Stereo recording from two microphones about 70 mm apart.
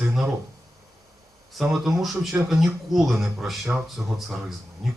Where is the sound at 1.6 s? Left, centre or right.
Centre.